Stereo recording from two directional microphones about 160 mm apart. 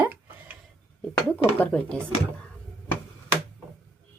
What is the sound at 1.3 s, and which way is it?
Speech, 10° left (ahead or behind).